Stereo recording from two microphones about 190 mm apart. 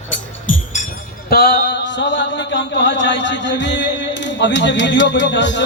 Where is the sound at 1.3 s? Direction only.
60° left (ahead or behind).